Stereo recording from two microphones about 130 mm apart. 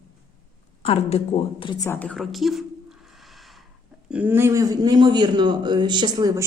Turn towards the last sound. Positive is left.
turn(degrees=-30)  # may be behind; listen again after turning